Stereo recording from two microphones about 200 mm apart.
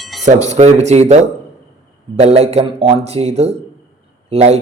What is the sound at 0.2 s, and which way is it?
Speech, 35° right (ahead or behind).